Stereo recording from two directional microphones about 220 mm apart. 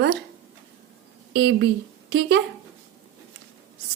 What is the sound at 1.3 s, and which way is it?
Speech, 50° right (ahead or behind).